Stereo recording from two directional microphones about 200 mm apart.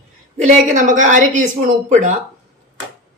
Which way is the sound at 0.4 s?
40° right (ahead or behind).